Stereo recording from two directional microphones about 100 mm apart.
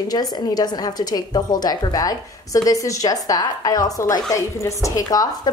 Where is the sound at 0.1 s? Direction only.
40° left (ahead or behind).